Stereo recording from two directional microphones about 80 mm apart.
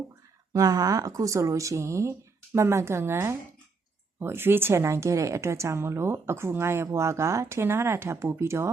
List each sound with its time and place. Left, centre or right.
0.5 s speech: right